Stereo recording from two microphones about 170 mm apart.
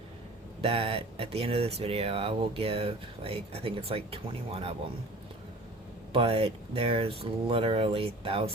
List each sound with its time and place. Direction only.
0.6 s speech: 35° right (ahead or behind)
6.1 s speech: 35° right (ahead or behind)